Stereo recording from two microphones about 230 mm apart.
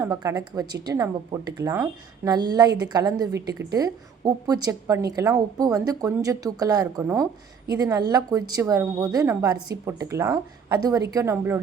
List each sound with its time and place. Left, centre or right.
0.0 s a woman's voice: centre